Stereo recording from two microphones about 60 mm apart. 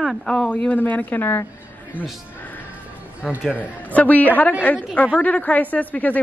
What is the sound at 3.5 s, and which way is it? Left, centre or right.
A woman's voice, left.